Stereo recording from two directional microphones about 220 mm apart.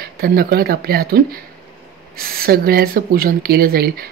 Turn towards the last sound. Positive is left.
turn(degrees=-45)  # may be behind; listen again after turning